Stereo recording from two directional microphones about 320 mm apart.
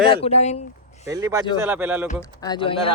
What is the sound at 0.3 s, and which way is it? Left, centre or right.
Speech, centre.